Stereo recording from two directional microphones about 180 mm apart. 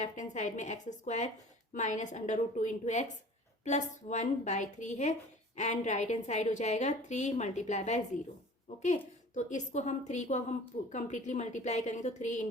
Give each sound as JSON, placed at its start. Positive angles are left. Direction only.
{"t": 0.0, "sound": "a woman's voice", "side_deg": 40}